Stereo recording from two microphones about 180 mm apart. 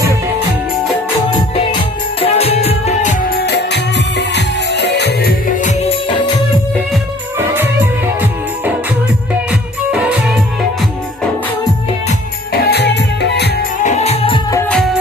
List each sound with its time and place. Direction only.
2.2 s music: 35° left (ahead or behind); by 5.3 s 70° left (ahead or behind)
5.5 s music: 40° left (ahead or behind)
7.3 s music: 10° right (ahead or behind)
9.9 s music: 5° right (ahead or behind)
12.6 s music: 70° left (ahead or behind)
13.8 s music: 40° left (ahead or behind)